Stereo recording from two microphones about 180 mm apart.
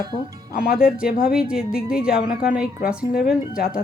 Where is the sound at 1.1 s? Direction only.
50° left (ahead or behind).